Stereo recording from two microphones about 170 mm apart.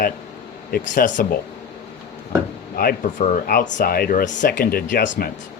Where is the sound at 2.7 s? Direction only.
60° left (ahead or behind).